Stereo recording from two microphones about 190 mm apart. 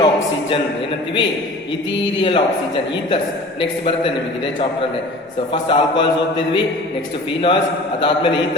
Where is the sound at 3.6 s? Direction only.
30° left (ahead or behind).